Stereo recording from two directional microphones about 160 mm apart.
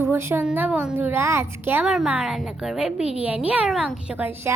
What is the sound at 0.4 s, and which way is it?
A woman's voice, 10° right (ahead or behind).